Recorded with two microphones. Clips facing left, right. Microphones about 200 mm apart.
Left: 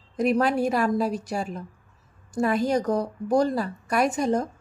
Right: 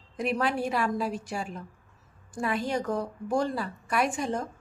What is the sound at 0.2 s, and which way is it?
A woman's voice, 40° left (ahead or behind).